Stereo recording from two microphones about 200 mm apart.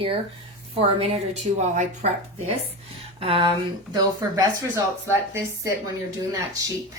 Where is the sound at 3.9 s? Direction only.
15° right (ahead or behind).